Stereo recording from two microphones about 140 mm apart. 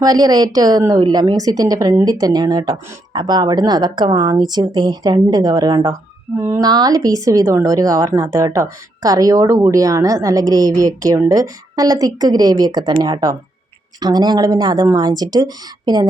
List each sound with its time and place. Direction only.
0.0 s a woman's voice: 30° right (ahead or behind)